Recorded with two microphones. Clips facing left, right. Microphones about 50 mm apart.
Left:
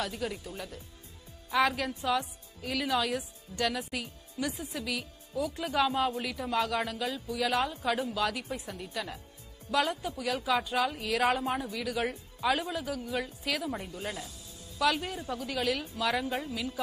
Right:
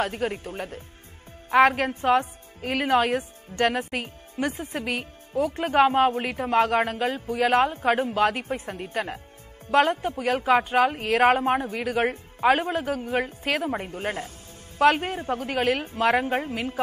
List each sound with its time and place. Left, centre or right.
0.0 s a woman's voice: right